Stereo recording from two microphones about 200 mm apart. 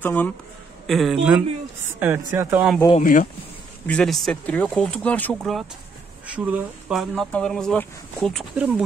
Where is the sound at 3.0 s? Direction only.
40° left (ahead or behind).